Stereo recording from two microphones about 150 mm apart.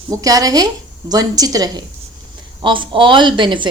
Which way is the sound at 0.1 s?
25° right (ahead or behind).